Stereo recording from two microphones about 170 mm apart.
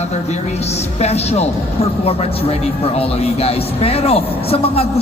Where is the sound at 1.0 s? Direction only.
40° left (ahead or behind).